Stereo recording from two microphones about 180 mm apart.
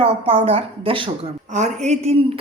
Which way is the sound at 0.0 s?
30° right (ahead or behind).